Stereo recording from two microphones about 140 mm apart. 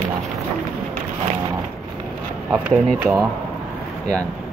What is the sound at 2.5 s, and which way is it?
Speech, 5° right (ahead or behind).